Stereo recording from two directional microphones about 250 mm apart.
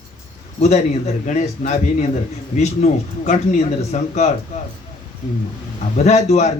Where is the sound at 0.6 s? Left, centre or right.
Left.